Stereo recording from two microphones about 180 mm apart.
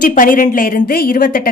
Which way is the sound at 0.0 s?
50° left (ahead or behind).